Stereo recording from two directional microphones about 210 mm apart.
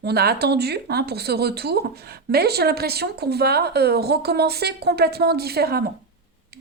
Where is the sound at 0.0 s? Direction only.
50° right (ahead or behind).